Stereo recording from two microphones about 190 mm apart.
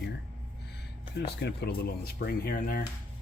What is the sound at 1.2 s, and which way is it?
Speech, 60° left (ahead or behind).